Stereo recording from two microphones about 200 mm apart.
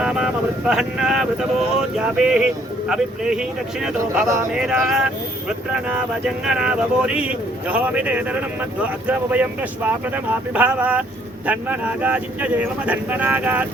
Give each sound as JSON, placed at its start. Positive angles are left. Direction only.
{"t": 0.0, "sound": "speech", "side_deg": -5}